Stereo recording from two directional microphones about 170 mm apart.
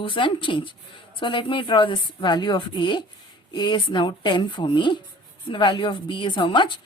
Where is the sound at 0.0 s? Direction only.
30° left (ahead or behind).